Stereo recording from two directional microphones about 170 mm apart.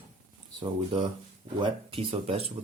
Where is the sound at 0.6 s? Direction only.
30° right (ahead or behind).